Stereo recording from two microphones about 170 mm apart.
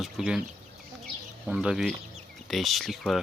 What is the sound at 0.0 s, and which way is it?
Speech, 5° right (ahead or behind).